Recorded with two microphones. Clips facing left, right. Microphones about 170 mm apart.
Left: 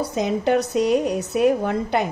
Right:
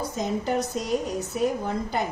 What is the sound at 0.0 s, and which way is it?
A woman's voice, 75° left (ahead or behind).